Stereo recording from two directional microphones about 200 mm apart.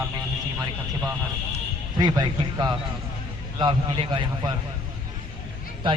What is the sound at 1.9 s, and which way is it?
A man's voice, 20° right (ahead or behind).